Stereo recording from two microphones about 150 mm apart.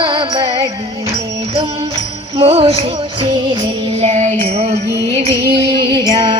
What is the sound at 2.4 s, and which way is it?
Music, 40° right (ahead or behind).